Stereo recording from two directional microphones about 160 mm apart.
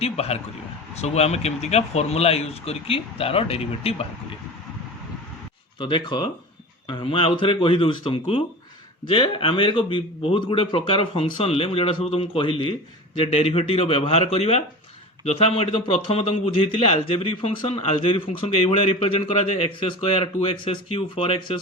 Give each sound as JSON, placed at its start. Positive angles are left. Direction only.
{"t": 0.0, "sound": "a man's voice", "side_deg": 40}
{"t": 5.8, "sound": "a man's voice", "side_deg": 30}